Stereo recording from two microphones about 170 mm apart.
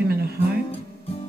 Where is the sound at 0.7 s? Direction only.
35° left (ahead or behind).